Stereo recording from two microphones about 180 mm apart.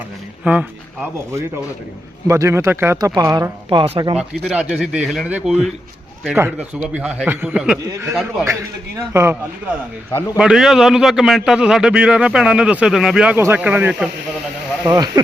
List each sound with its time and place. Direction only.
0.4 s speech: 10° right (ahead or behind); by 4.2 s 30° right (ahead or behind)
4.5 s a man's voice: 5° right (ahead or behind)
7.9 s speech: 15° right (ahead or behind)
9.1 s a man's voice: 10° right (ahead or behind)
14.8 s speech: 20° right (ahead or behind)